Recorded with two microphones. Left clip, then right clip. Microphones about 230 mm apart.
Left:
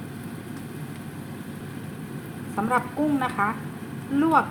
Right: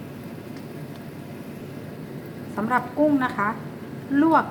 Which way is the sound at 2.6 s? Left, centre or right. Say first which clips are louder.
Right 2 dB; centre.